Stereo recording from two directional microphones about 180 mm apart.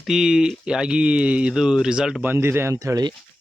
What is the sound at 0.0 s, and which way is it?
Speech, 5° right (ahead or behind).